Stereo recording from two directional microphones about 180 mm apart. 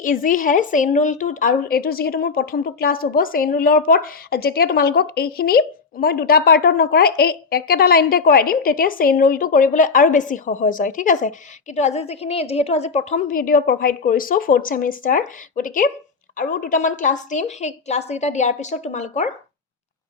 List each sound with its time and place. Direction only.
0.0 s a woman's voice: 50° left (ahead or behind)